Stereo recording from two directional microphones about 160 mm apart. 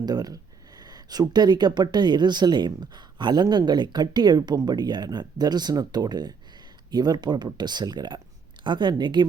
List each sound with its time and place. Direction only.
0.0 s speech: 25° right (ahead or behind)